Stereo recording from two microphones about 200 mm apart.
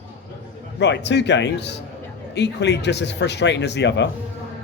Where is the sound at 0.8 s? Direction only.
60° left (ahead or behind).